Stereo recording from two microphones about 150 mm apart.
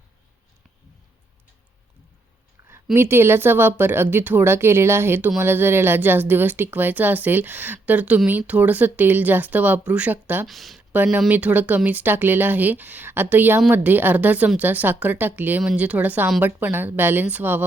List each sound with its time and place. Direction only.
2.6 s a sound: 20° right (ahead or behind)
2.9 s a woman's voice: 15° right (ahead or behind)
10.4 s speech: centre (ahead or behind)
10.9 s a woman's voice: 15° right (ahead or behind)